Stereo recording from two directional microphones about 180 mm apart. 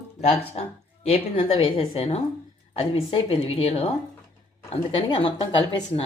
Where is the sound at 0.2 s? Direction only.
40° left (ahead or behind).